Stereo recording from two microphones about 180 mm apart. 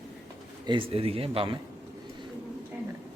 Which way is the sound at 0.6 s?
30° right (ahead or behind).